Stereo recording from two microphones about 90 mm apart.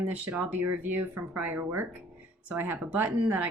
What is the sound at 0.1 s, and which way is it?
Speech, 20° right (ahead or behind).